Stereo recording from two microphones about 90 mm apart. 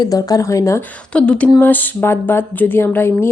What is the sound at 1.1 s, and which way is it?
Speech, 10° left (ahead or behind).